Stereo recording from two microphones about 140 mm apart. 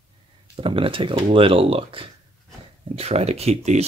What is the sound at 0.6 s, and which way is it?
Speech, 40° right (ahead or behind).